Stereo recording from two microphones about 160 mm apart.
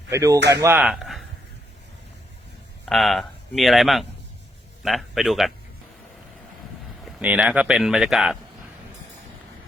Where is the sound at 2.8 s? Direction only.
Centre (ahead or behind).